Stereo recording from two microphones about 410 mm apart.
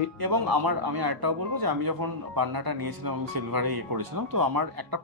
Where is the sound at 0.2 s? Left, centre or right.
Right.